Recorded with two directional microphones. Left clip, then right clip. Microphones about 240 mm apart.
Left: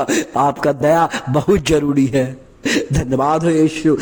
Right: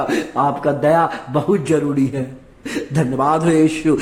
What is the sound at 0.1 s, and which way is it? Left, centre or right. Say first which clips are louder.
A man's voice: left 2 dB; left.